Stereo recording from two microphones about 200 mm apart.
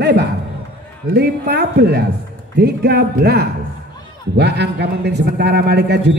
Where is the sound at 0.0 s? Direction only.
60° right (ahead or behind).